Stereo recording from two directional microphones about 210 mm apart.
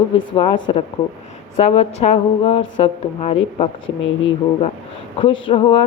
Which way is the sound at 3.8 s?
65° left (ahead or behind).